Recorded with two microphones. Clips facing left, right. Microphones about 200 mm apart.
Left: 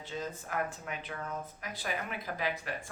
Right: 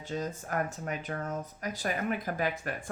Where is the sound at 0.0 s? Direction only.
45° right (ahead or behind).